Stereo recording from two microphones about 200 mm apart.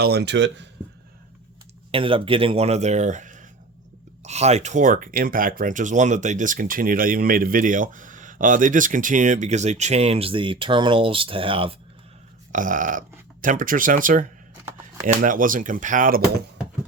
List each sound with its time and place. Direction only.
0.0 s speech: 55° right (ahead or behind)
1.9 s speech: 25° right (ahead or behind)
12.5 s speech: 40° right (ahead or behind)